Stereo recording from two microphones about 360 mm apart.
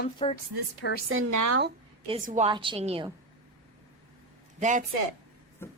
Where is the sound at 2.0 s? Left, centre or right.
Centre.